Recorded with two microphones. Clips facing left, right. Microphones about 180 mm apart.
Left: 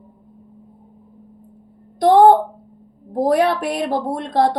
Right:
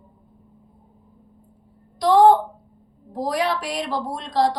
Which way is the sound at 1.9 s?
55° left (ahead or behind).